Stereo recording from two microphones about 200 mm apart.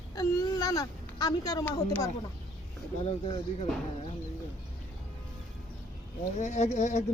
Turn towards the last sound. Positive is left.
turn(degrees=35)  # may be behind; listen again after turning